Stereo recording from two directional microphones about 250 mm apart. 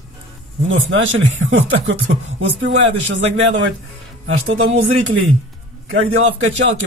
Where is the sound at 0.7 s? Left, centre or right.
Right.